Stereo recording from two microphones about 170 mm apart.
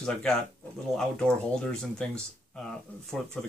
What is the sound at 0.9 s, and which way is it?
Speech, 5° left (ahead or behind).